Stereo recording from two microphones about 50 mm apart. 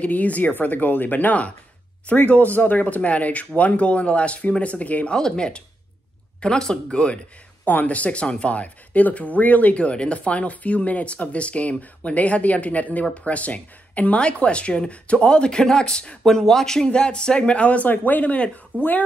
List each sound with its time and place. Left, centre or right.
0.0 s speech: left
5.1 s speech: centre
7.6 s speech: left
16.3 s speech: centre; by 19.0 s left